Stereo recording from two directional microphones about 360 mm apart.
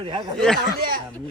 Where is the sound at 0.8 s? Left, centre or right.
Right.